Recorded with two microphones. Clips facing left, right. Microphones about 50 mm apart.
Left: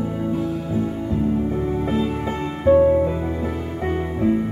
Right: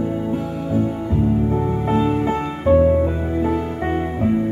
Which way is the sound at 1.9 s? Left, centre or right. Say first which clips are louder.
Right 4 dB; centre.